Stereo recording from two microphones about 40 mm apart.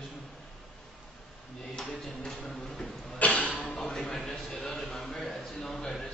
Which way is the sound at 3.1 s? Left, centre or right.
Left.